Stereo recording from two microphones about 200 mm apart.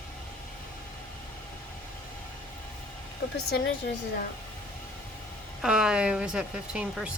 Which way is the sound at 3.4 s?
55° left (ahead or behind).